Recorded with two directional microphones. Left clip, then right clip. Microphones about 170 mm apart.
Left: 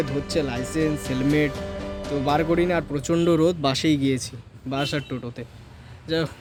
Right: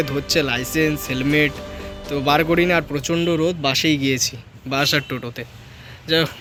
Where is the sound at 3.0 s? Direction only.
30° left (ahead or behind).